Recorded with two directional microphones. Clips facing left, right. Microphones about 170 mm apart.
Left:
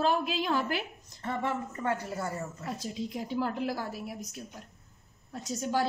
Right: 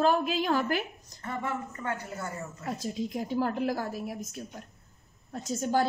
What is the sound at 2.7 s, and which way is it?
A woman's voice, 45° right (ahead or behind).